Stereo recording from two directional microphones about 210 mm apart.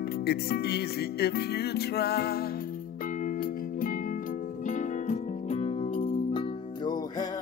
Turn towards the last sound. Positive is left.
turn(degrees=30)  # may be behind; listen again after turning